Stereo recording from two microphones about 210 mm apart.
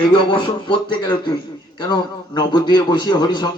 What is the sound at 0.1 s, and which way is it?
A man's voice, 20° left (ahead or behind).